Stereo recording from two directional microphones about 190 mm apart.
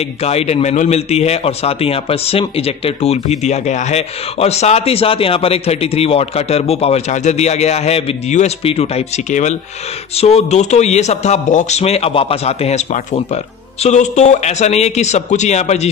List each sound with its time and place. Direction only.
0.2 s speech: 35° left (ahead or behind)